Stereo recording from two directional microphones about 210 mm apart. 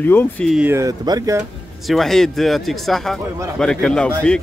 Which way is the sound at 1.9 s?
Centre (ahead or behind).